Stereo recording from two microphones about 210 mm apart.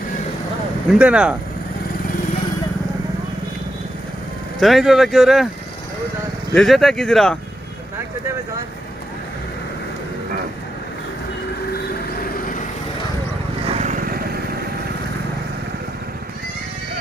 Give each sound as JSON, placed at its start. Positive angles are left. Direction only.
{"t": 0.9, "sound": "speech", "side_deg": -5}
{"t": 4.6, "sound": "speech", "side_deg": 0}
{"t": 6.5, "sound": "speech", "side_deg": 0}
{"t": 12.2, "sound": "vehicle", "side_deg": 40}
{"t": 13.7, "sound": "vehicle", "side_deg": -35}